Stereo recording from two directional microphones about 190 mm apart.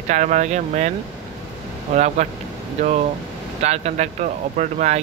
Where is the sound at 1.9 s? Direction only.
40° right (ahead or behind).